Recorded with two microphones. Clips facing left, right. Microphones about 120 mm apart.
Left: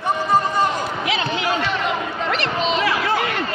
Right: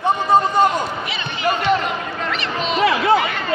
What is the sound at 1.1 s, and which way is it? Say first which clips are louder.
Speech: left 6 dB; 90° left.